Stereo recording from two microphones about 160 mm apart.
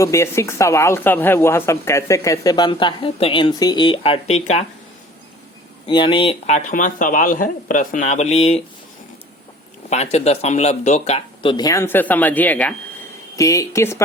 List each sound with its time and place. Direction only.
0.0 s speech: 20° left (ahead or behind); by 4.6 s 45° left (ahead or behind)
5.9 s speech: 30° left (ahead or behind)
6.7 s speech: 55° left (ahead or behind)
9.9 s speech: 40° left (ahead or behind)
11.4 s speech: 25° left (ahead or behind)
13.3 s speech: 20° left (ahead or behind)